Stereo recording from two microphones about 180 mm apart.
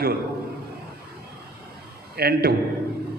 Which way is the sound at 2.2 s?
60° right (ahead or behind).